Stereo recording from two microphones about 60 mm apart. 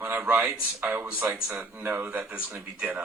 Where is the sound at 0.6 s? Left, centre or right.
Right.